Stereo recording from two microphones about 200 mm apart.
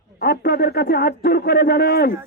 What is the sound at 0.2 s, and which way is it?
A man's voice, 50° left (ahead or behind).